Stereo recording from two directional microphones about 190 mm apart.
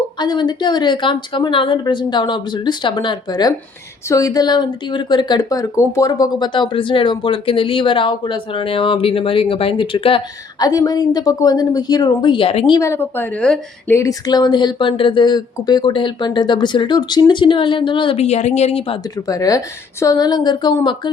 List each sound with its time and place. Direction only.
0.2 s a woman's voice: 20° left (ahead or behind)
19.3 s a woman's voice: 20° left (ahead or behind)